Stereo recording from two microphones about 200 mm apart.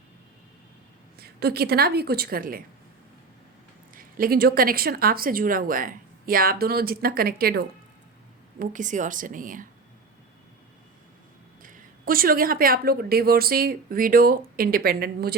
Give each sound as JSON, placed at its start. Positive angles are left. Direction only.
{"t": 1.2, "sound": "speech", "side_deg": -50}
{"t": 3.9, "sound": "a woman's voice", "side_deg": -45}
{"t": 11.6, "sound": "speech", "side_deg": -45}